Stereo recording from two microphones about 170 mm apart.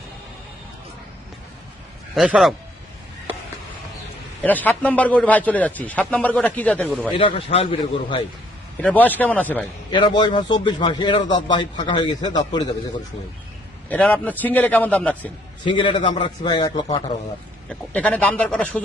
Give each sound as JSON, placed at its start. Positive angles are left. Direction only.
{"t": 2.1, "sound": "a man's voice", "side_deg": -5}
{"t": 4.4, "sound": "a man's voice", "side_deg": 10}
{"t": 7.2, "sound": "a man's voice", "side_deg": 35}
{"t": 8.8, "sound": "a man's voice", "side_deg": 10}
{"t": 9.9, "sound": "a man's voice", "side_deg": 25}
{"t": 13.9, "sound": "a man's voice", "side_deg": 10}
{"t": 15.6, "sound": "a man's voice", "side_deg": 30}
{"t": 17.7, "sound": "a man's voice", "side_deg": 10}